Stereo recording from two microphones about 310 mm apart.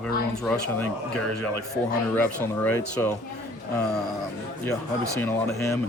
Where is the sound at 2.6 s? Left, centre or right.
Centre.